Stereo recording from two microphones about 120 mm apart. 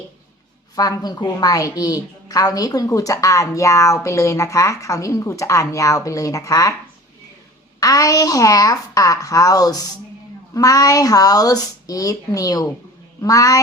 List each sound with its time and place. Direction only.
0.8 s a woman's voice: 30° left (ahead or behind)
7.8 s a woman's voice: 30° left (ahead or behind)